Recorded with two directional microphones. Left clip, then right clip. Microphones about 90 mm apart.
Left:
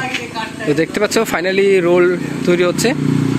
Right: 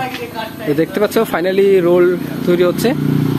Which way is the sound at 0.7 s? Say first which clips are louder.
Right 1 dB; 5° right (ahead or behind).